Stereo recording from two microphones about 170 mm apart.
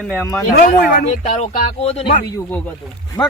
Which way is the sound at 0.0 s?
5° left (ahead or behind).